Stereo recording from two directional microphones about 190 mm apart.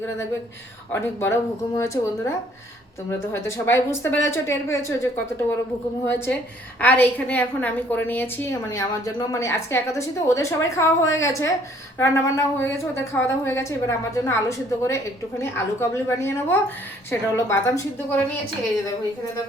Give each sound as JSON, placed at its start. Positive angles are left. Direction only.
{"t": 1.2, "sound": "a woman's voice", "side_deg": 15}